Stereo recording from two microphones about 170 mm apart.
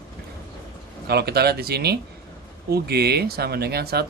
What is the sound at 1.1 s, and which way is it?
Speech, 70° right (ahead or behind).